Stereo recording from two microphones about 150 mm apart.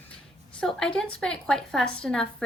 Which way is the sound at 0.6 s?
5° left (ahead or behind).